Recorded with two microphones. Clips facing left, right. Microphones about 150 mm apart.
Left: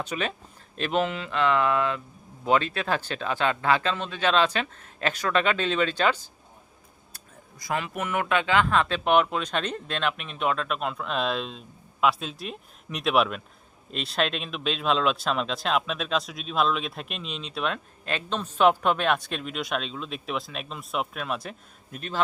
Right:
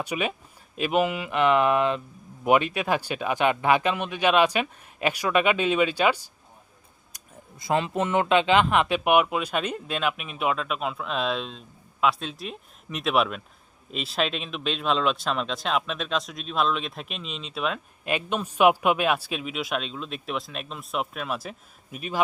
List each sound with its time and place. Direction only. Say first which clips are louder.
0.0 s speech: right 2 dB; 10° right (ahead or behind)
7.6 s speech: right 5 dB; 25° right (ahead or behind); by 22.2 s 10° right (ahead or behind)